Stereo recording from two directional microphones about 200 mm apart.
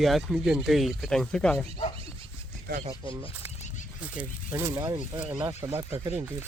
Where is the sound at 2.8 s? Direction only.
15° right (ahead or behind).